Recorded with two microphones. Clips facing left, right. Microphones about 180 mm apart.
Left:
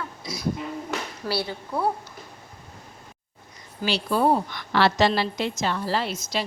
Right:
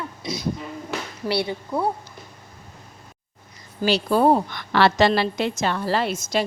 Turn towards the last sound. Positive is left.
turn(degrees=-50)  # may be behind; listen again after turning